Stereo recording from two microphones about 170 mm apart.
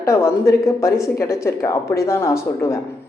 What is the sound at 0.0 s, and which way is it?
Speech, 15° left (ahead or behind).